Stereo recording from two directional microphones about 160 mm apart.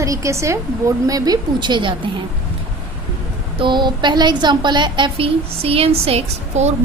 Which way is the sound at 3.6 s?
30° right (ahead or behind).